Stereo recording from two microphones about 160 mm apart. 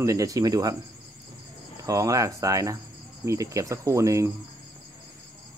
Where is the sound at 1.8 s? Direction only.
20° right (ahead or behind).